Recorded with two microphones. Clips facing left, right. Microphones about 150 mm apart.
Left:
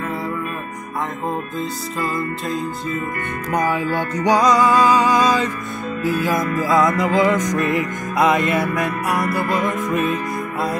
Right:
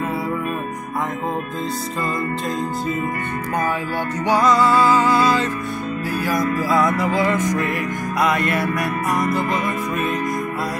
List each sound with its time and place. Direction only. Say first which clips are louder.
4.2 s music: left 1 dB; 15° left (ahead or behind)